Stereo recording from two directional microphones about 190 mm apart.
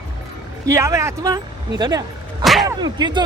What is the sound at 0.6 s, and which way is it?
A man's voice, 15° right (ahead or behind).